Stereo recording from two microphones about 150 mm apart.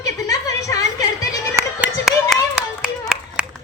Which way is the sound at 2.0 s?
5° right (ahead or behind).